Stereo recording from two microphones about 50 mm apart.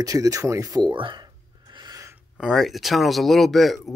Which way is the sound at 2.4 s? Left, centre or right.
Centre.